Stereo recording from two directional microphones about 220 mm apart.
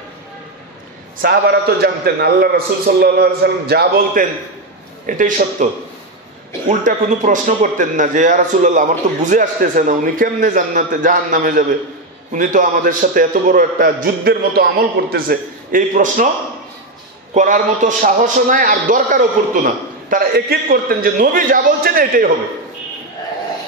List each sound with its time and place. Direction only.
1.2 s a man's voice: 45° right (ahead or behind)
6.7 s a man's voice: 35° right (ahead or behind)
17.3 s a man's voice: 35° right (ahead or behind)